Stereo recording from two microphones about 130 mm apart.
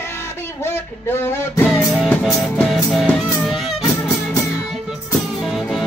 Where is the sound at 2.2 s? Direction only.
Centre (ahead or behind).